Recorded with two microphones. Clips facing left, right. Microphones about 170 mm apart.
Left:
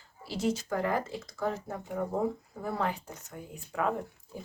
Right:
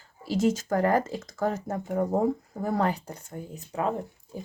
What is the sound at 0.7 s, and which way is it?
Speech, 45° right (ahead or behind).